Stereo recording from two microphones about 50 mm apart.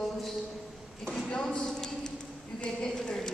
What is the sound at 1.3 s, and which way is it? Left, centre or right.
Speech, centre.